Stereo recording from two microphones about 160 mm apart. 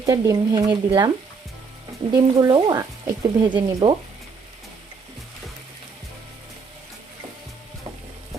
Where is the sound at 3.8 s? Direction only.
40° right (ahead or behind).